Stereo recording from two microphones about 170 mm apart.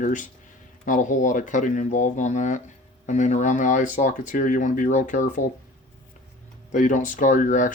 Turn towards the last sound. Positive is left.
turn(degrees=50)  # may be behind; listen again after turning